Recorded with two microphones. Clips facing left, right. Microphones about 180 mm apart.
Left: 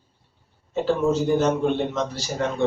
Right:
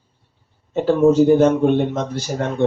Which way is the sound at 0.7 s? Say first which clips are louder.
Right 7 dB; 50° right (ahead or behind).